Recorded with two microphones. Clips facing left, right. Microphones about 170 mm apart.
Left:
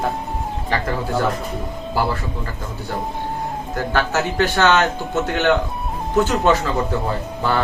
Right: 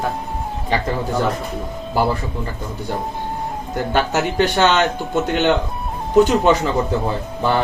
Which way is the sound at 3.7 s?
20° right (ahead or behind).